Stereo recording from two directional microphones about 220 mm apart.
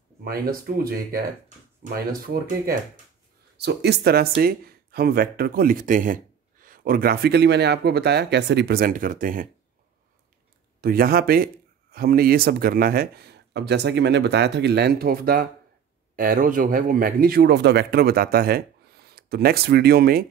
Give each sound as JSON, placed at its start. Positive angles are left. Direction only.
{"t": 0.2, "sound": "speech", "side_deg": -45}
{"t": 10.8, "sound": "speech", "side_deg": -40}